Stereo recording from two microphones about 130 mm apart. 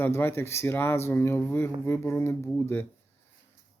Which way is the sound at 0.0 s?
15° left (ahead or behind).